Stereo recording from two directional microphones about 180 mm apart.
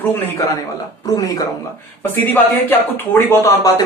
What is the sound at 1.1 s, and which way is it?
Speech, 20° left (ahead or behind).